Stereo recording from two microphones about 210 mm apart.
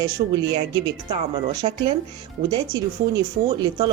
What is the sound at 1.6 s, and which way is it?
Speech, 30° right (ahead or behind).